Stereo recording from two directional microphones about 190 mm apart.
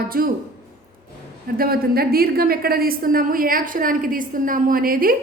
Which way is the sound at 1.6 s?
50° right (ahead or behind).